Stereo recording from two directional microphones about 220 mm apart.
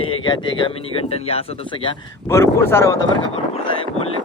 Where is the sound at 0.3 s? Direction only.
25° left (ahead or behind).